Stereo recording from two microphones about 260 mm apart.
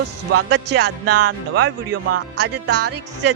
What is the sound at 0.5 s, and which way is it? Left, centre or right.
Music, right.